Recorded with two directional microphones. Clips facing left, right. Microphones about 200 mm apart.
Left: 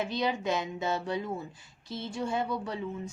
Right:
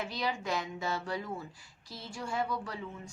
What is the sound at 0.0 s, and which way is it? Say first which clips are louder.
A woman's voice: left 5 dB; 20° left (ahead or behind).